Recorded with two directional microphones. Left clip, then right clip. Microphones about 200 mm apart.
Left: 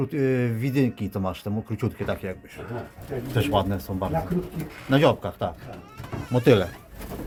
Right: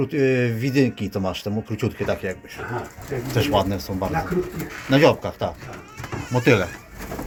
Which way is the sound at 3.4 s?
5° left (ahead or behind).